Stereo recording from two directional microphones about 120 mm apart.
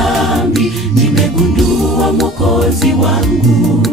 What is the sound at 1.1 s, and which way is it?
Music, centre (ahead or behind).